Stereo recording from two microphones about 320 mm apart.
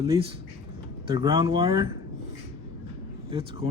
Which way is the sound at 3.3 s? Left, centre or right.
Centre.